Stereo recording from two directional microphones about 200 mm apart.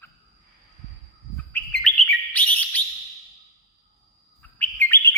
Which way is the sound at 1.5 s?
5° left (ahead or behind).